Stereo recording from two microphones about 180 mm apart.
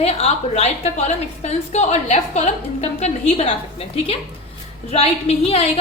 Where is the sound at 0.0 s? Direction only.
35° left (ahead or behind).